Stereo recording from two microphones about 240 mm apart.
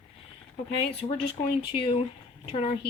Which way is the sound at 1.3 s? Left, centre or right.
Left.